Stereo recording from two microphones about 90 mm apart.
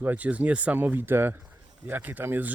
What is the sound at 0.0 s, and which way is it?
A man's voice, 20° right (ahead or behind).